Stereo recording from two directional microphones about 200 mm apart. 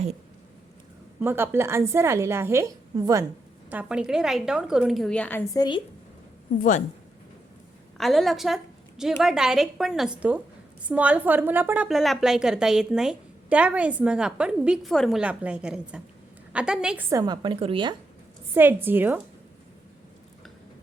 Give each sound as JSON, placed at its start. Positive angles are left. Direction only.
{"t": 1.2, "sound": "a woman's voice", "side_deg": -10}
{"t": 5.5, "sound": "speech", "side_deg": 20}
{"t": 6.6, "sound": "a woman's voice", "side_deg": 40}
{"t": 7.9, "sound": "a woman's voice", "side_deg": 0}
{"t": 17.1, "sound": "a woman's voice", "side_deg": -20}
{"t": 18.5, "sound": "a woman's voice", "side_deg": -10}